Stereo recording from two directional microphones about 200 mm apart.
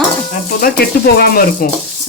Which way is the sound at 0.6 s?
50° left (ahead or behind).